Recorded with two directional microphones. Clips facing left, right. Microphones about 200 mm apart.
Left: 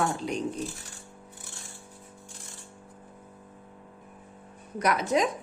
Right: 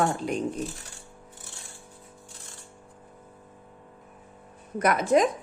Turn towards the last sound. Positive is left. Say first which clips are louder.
# right 4 dB
turn(degrees=-50)  # may be behind; listen again after turning